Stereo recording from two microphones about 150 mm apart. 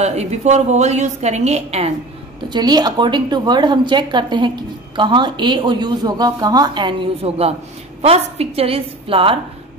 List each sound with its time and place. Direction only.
0.0 s a woman's voice: 50° right (ahead or behind)
2.5 s a woman's voice: 30° right (ahead or behind)